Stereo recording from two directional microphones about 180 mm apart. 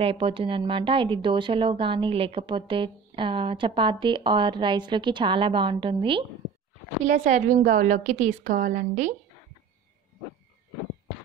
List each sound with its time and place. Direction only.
0.0 s speech: 30° right (ahead or behind)
7.1 s a woman's voice: 40° right (ahead or behind)